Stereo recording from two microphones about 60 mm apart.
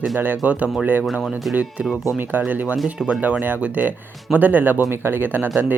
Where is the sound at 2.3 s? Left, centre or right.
Right.